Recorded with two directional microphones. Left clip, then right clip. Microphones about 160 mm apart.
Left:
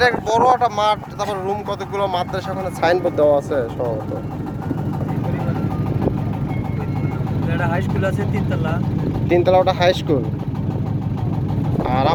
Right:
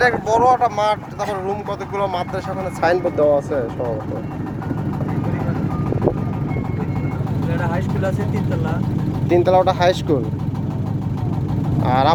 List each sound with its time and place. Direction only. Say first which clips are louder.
0.0 s speech: even; 10° right (ahead or behind); by 3.6 s 5° left (ahead or behind)
7.5 s vehicle: left 2 dB; 45° left (ahead or behind)
9.3 s speech: even; 5° right (ahead or behind)
11.9 s speech: right 3 dB; 25° right (ahead or behind)